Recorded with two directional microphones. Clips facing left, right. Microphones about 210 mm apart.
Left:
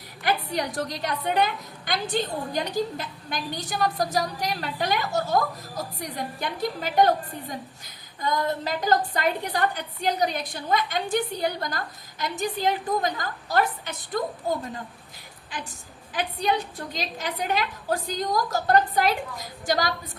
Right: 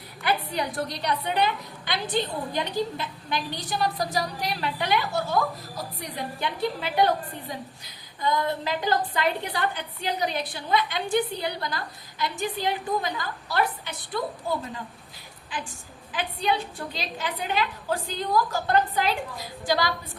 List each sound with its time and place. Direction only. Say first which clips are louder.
0.2 s a woman's voice: left 1 dB; 45° left (ahead or behind)
8.2 s a woman's voice: even; 45° left (ahead or behind)
16.1 s a woman's voice: left 1 dB; 40° left (ahead or behind)